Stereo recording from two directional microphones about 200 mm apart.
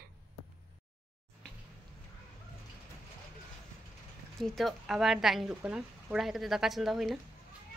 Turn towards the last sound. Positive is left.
turn(degrees=0)  # may be behind; listen again after turning